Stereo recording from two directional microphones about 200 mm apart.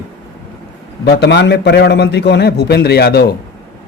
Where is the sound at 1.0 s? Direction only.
60° left (ahead or behind).